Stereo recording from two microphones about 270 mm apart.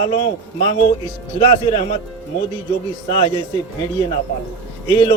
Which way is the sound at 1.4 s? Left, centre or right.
Left.